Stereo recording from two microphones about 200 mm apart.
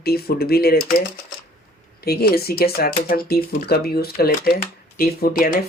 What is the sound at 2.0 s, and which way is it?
Speech, 50° left (ahead or behind).